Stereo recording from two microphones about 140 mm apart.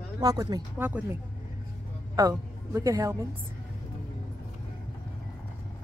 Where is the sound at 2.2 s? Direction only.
25° right (ahead or behind).